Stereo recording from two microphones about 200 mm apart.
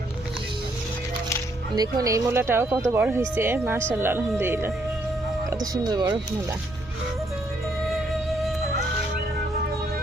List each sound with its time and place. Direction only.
1.7 s speech: 20° right (ahead or behind)
5.7 s speech: 20° right (ahead or behind)
7.9 s music: centre (ahead or behind)